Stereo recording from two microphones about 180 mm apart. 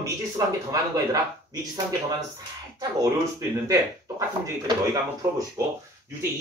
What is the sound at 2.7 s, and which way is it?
Speech, 20° right (ahead or behind).